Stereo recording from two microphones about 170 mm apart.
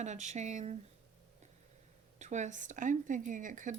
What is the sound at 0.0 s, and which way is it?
Speech, 45° right (ahead or behind).